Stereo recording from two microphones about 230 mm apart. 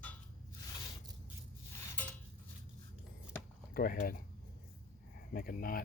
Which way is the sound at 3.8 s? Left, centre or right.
Left.